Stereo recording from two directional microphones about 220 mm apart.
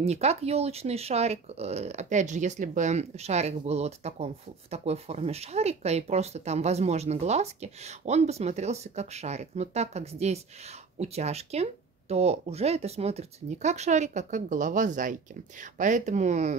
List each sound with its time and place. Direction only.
0.0 s speech: 30° right (ahead or behind)